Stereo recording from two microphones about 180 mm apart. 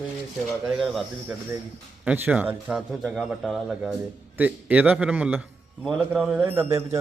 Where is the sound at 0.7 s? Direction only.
Centre (ahead or behind).